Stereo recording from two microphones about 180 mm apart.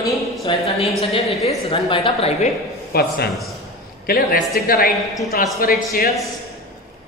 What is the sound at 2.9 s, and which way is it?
A man's voice, 60° left (ahead or behind).